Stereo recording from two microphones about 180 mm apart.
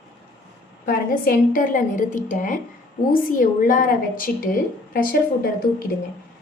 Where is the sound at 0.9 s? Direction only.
55° left (ahead or behind).